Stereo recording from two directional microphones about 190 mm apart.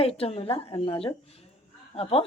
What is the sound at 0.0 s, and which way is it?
A woman's voice, 30° left (ahead or behind).